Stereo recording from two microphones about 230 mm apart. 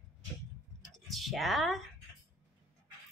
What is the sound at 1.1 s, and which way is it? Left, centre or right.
Speech, centre.